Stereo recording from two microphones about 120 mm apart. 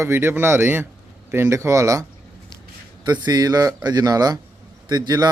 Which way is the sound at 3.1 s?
30° right (ahead or behind).